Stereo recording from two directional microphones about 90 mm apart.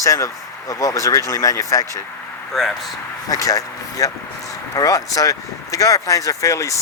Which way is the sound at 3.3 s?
40° left (ahead or behind).